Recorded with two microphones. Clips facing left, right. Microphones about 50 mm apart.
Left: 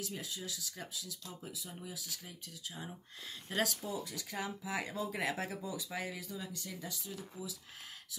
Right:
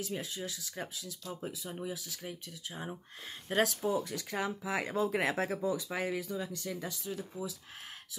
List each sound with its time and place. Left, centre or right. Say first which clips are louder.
0.0 s speech: right 5 dB; right
3.4 s speech: right 5 dB; right
3.8 s speech: right 8 dB; right